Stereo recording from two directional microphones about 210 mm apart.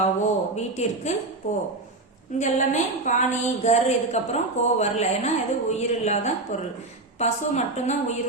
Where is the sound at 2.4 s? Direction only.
35° left (ahead or behind).